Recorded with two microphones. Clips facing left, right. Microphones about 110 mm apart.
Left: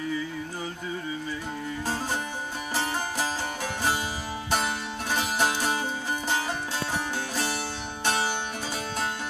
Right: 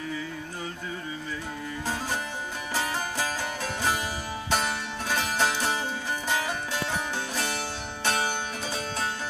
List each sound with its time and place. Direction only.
2.7 s music: 20° left (ahead or behind)
5.1 s music: 15° left (ahead or behind)